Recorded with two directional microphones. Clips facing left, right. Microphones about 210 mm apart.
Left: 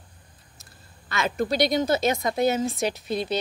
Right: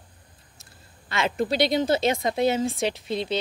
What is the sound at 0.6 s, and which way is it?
Speech, 25° right (ahead or behind).